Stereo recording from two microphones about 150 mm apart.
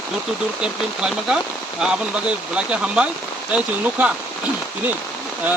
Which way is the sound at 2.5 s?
10° right (ahead or behind).